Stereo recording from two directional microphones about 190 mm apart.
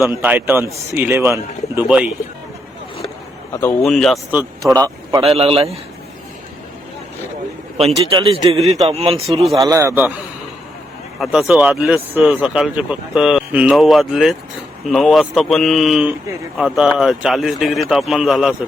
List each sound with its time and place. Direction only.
0.2 s a man's voice: 10° right (ahead or behind)
3.5 s speech: 10° left (ahead or behind)
3.8 s speech: centre (ahead or behind)
5.2 s a man's voice: 30° right (ahead or behind)
7.8 s a man's voice: 30° right (ahead or behind)
9.6 s a man's voice: 15° right (ahead or behind)
11.2 s speech: centre (ahead or behind)